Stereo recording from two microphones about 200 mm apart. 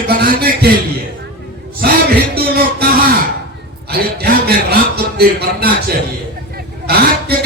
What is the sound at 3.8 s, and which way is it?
A man's voice, 50° right (ahead or behind).